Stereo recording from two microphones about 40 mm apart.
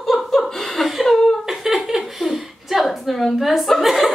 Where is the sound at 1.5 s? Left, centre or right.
Centre.